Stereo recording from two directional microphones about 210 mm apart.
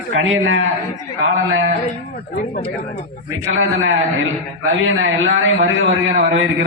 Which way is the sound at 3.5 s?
65° right (ahead or behind).